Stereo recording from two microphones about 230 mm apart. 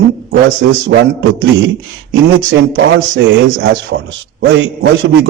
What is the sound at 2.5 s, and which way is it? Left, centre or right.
A man's voice, right.